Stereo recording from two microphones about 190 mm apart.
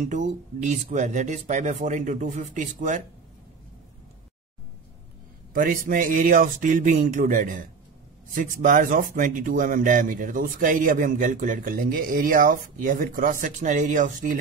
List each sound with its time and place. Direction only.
0.0 s speech: 40° right (ahead or behind)
5.5 s speech: 50° right (ahead or behind)